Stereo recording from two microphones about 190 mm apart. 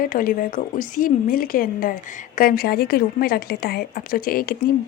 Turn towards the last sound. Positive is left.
turn(degrees=50)  # may be behind; listen again after turning